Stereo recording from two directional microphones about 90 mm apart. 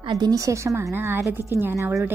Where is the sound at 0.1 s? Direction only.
45° right (ahead or behind).